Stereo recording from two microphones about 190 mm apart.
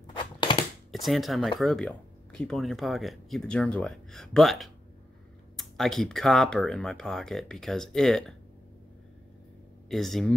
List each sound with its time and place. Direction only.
0.0 s a sound: 25° left (ahead or behind)
0.9 s speech: centre (ahead or behind)
9.8 s speech: centre (ahead or behind)